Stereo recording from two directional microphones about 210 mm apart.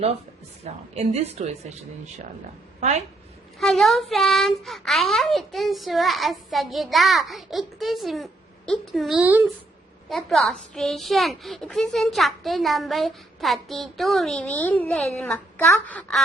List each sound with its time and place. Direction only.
0.6 s speech: 30° right (ahead or behind)
3.6 s a child's voice: centre (ahead or behind)